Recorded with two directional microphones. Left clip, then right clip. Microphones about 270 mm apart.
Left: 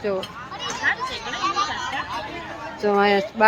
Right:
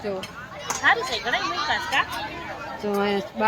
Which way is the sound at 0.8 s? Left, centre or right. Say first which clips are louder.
Right 4 dB; centre.